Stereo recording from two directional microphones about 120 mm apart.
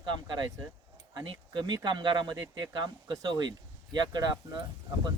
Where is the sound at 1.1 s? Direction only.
40° right (ahead or behind).